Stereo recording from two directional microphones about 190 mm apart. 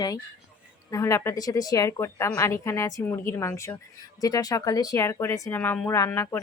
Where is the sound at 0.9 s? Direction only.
15° left (ahead or behind).